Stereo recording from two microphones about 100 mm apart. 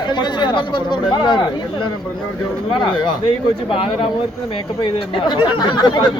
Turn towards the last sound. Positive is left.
turn(degrees=50)  # may be behind; listen again after turning